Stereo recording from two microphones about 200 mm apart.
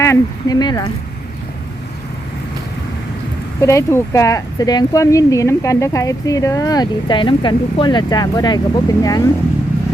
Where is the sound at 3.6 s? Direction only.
15° left (ahead or behind).